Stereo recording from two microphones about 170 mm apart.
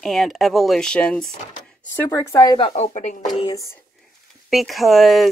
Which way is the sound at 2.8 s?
45° left (ahead or behind).